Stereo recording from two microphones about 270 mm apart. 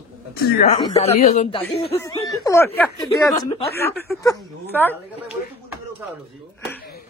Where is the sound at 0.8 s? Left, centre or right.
Left; by 4.9 s centre.